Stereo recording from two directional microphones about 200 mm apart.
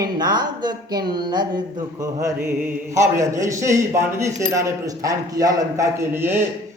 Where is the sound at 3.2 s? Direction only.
15° right (ahead or behind).